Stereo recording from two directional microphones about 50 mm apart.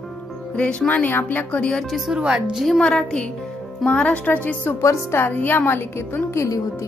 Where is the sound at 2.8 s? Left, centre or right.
Centre.